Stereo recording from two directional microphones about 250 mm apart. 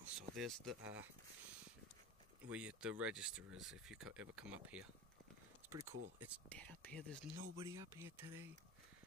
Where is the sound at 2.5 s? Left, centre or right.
Centre.